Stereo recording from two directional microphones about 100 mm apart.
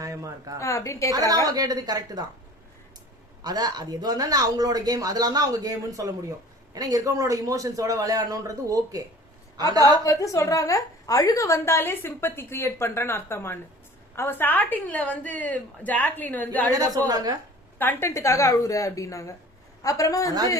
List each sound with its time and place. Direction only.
0.0 s a woman's voice: 35° right (ahead or behind)
0.6 s a woman's voice: 30° left (ahead or behind)
1.5 s speech: 40° right (ahead or behind)
3.4 s speech: 40° right (ahead or behind)
10.0 s a woman's voice: 35° left (ahead or behind); by 16.7 s 15° left (ahead or behind)
16.7 s speech: 35° right (ahead or behind)
17.7 s a woman's voice: 25° left (ahead or behind)